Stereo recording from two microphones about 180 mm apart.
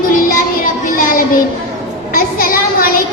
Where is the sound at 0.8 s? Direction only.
50° left (ahead or behind).